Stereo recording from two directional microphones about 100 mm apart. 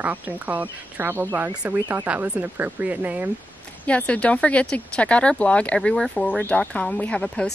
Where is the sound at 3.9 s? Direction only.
15° left (ahead or behind).